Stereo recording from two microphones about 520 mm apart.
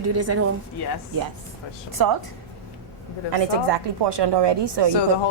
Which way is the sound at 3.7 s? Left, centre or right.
Right.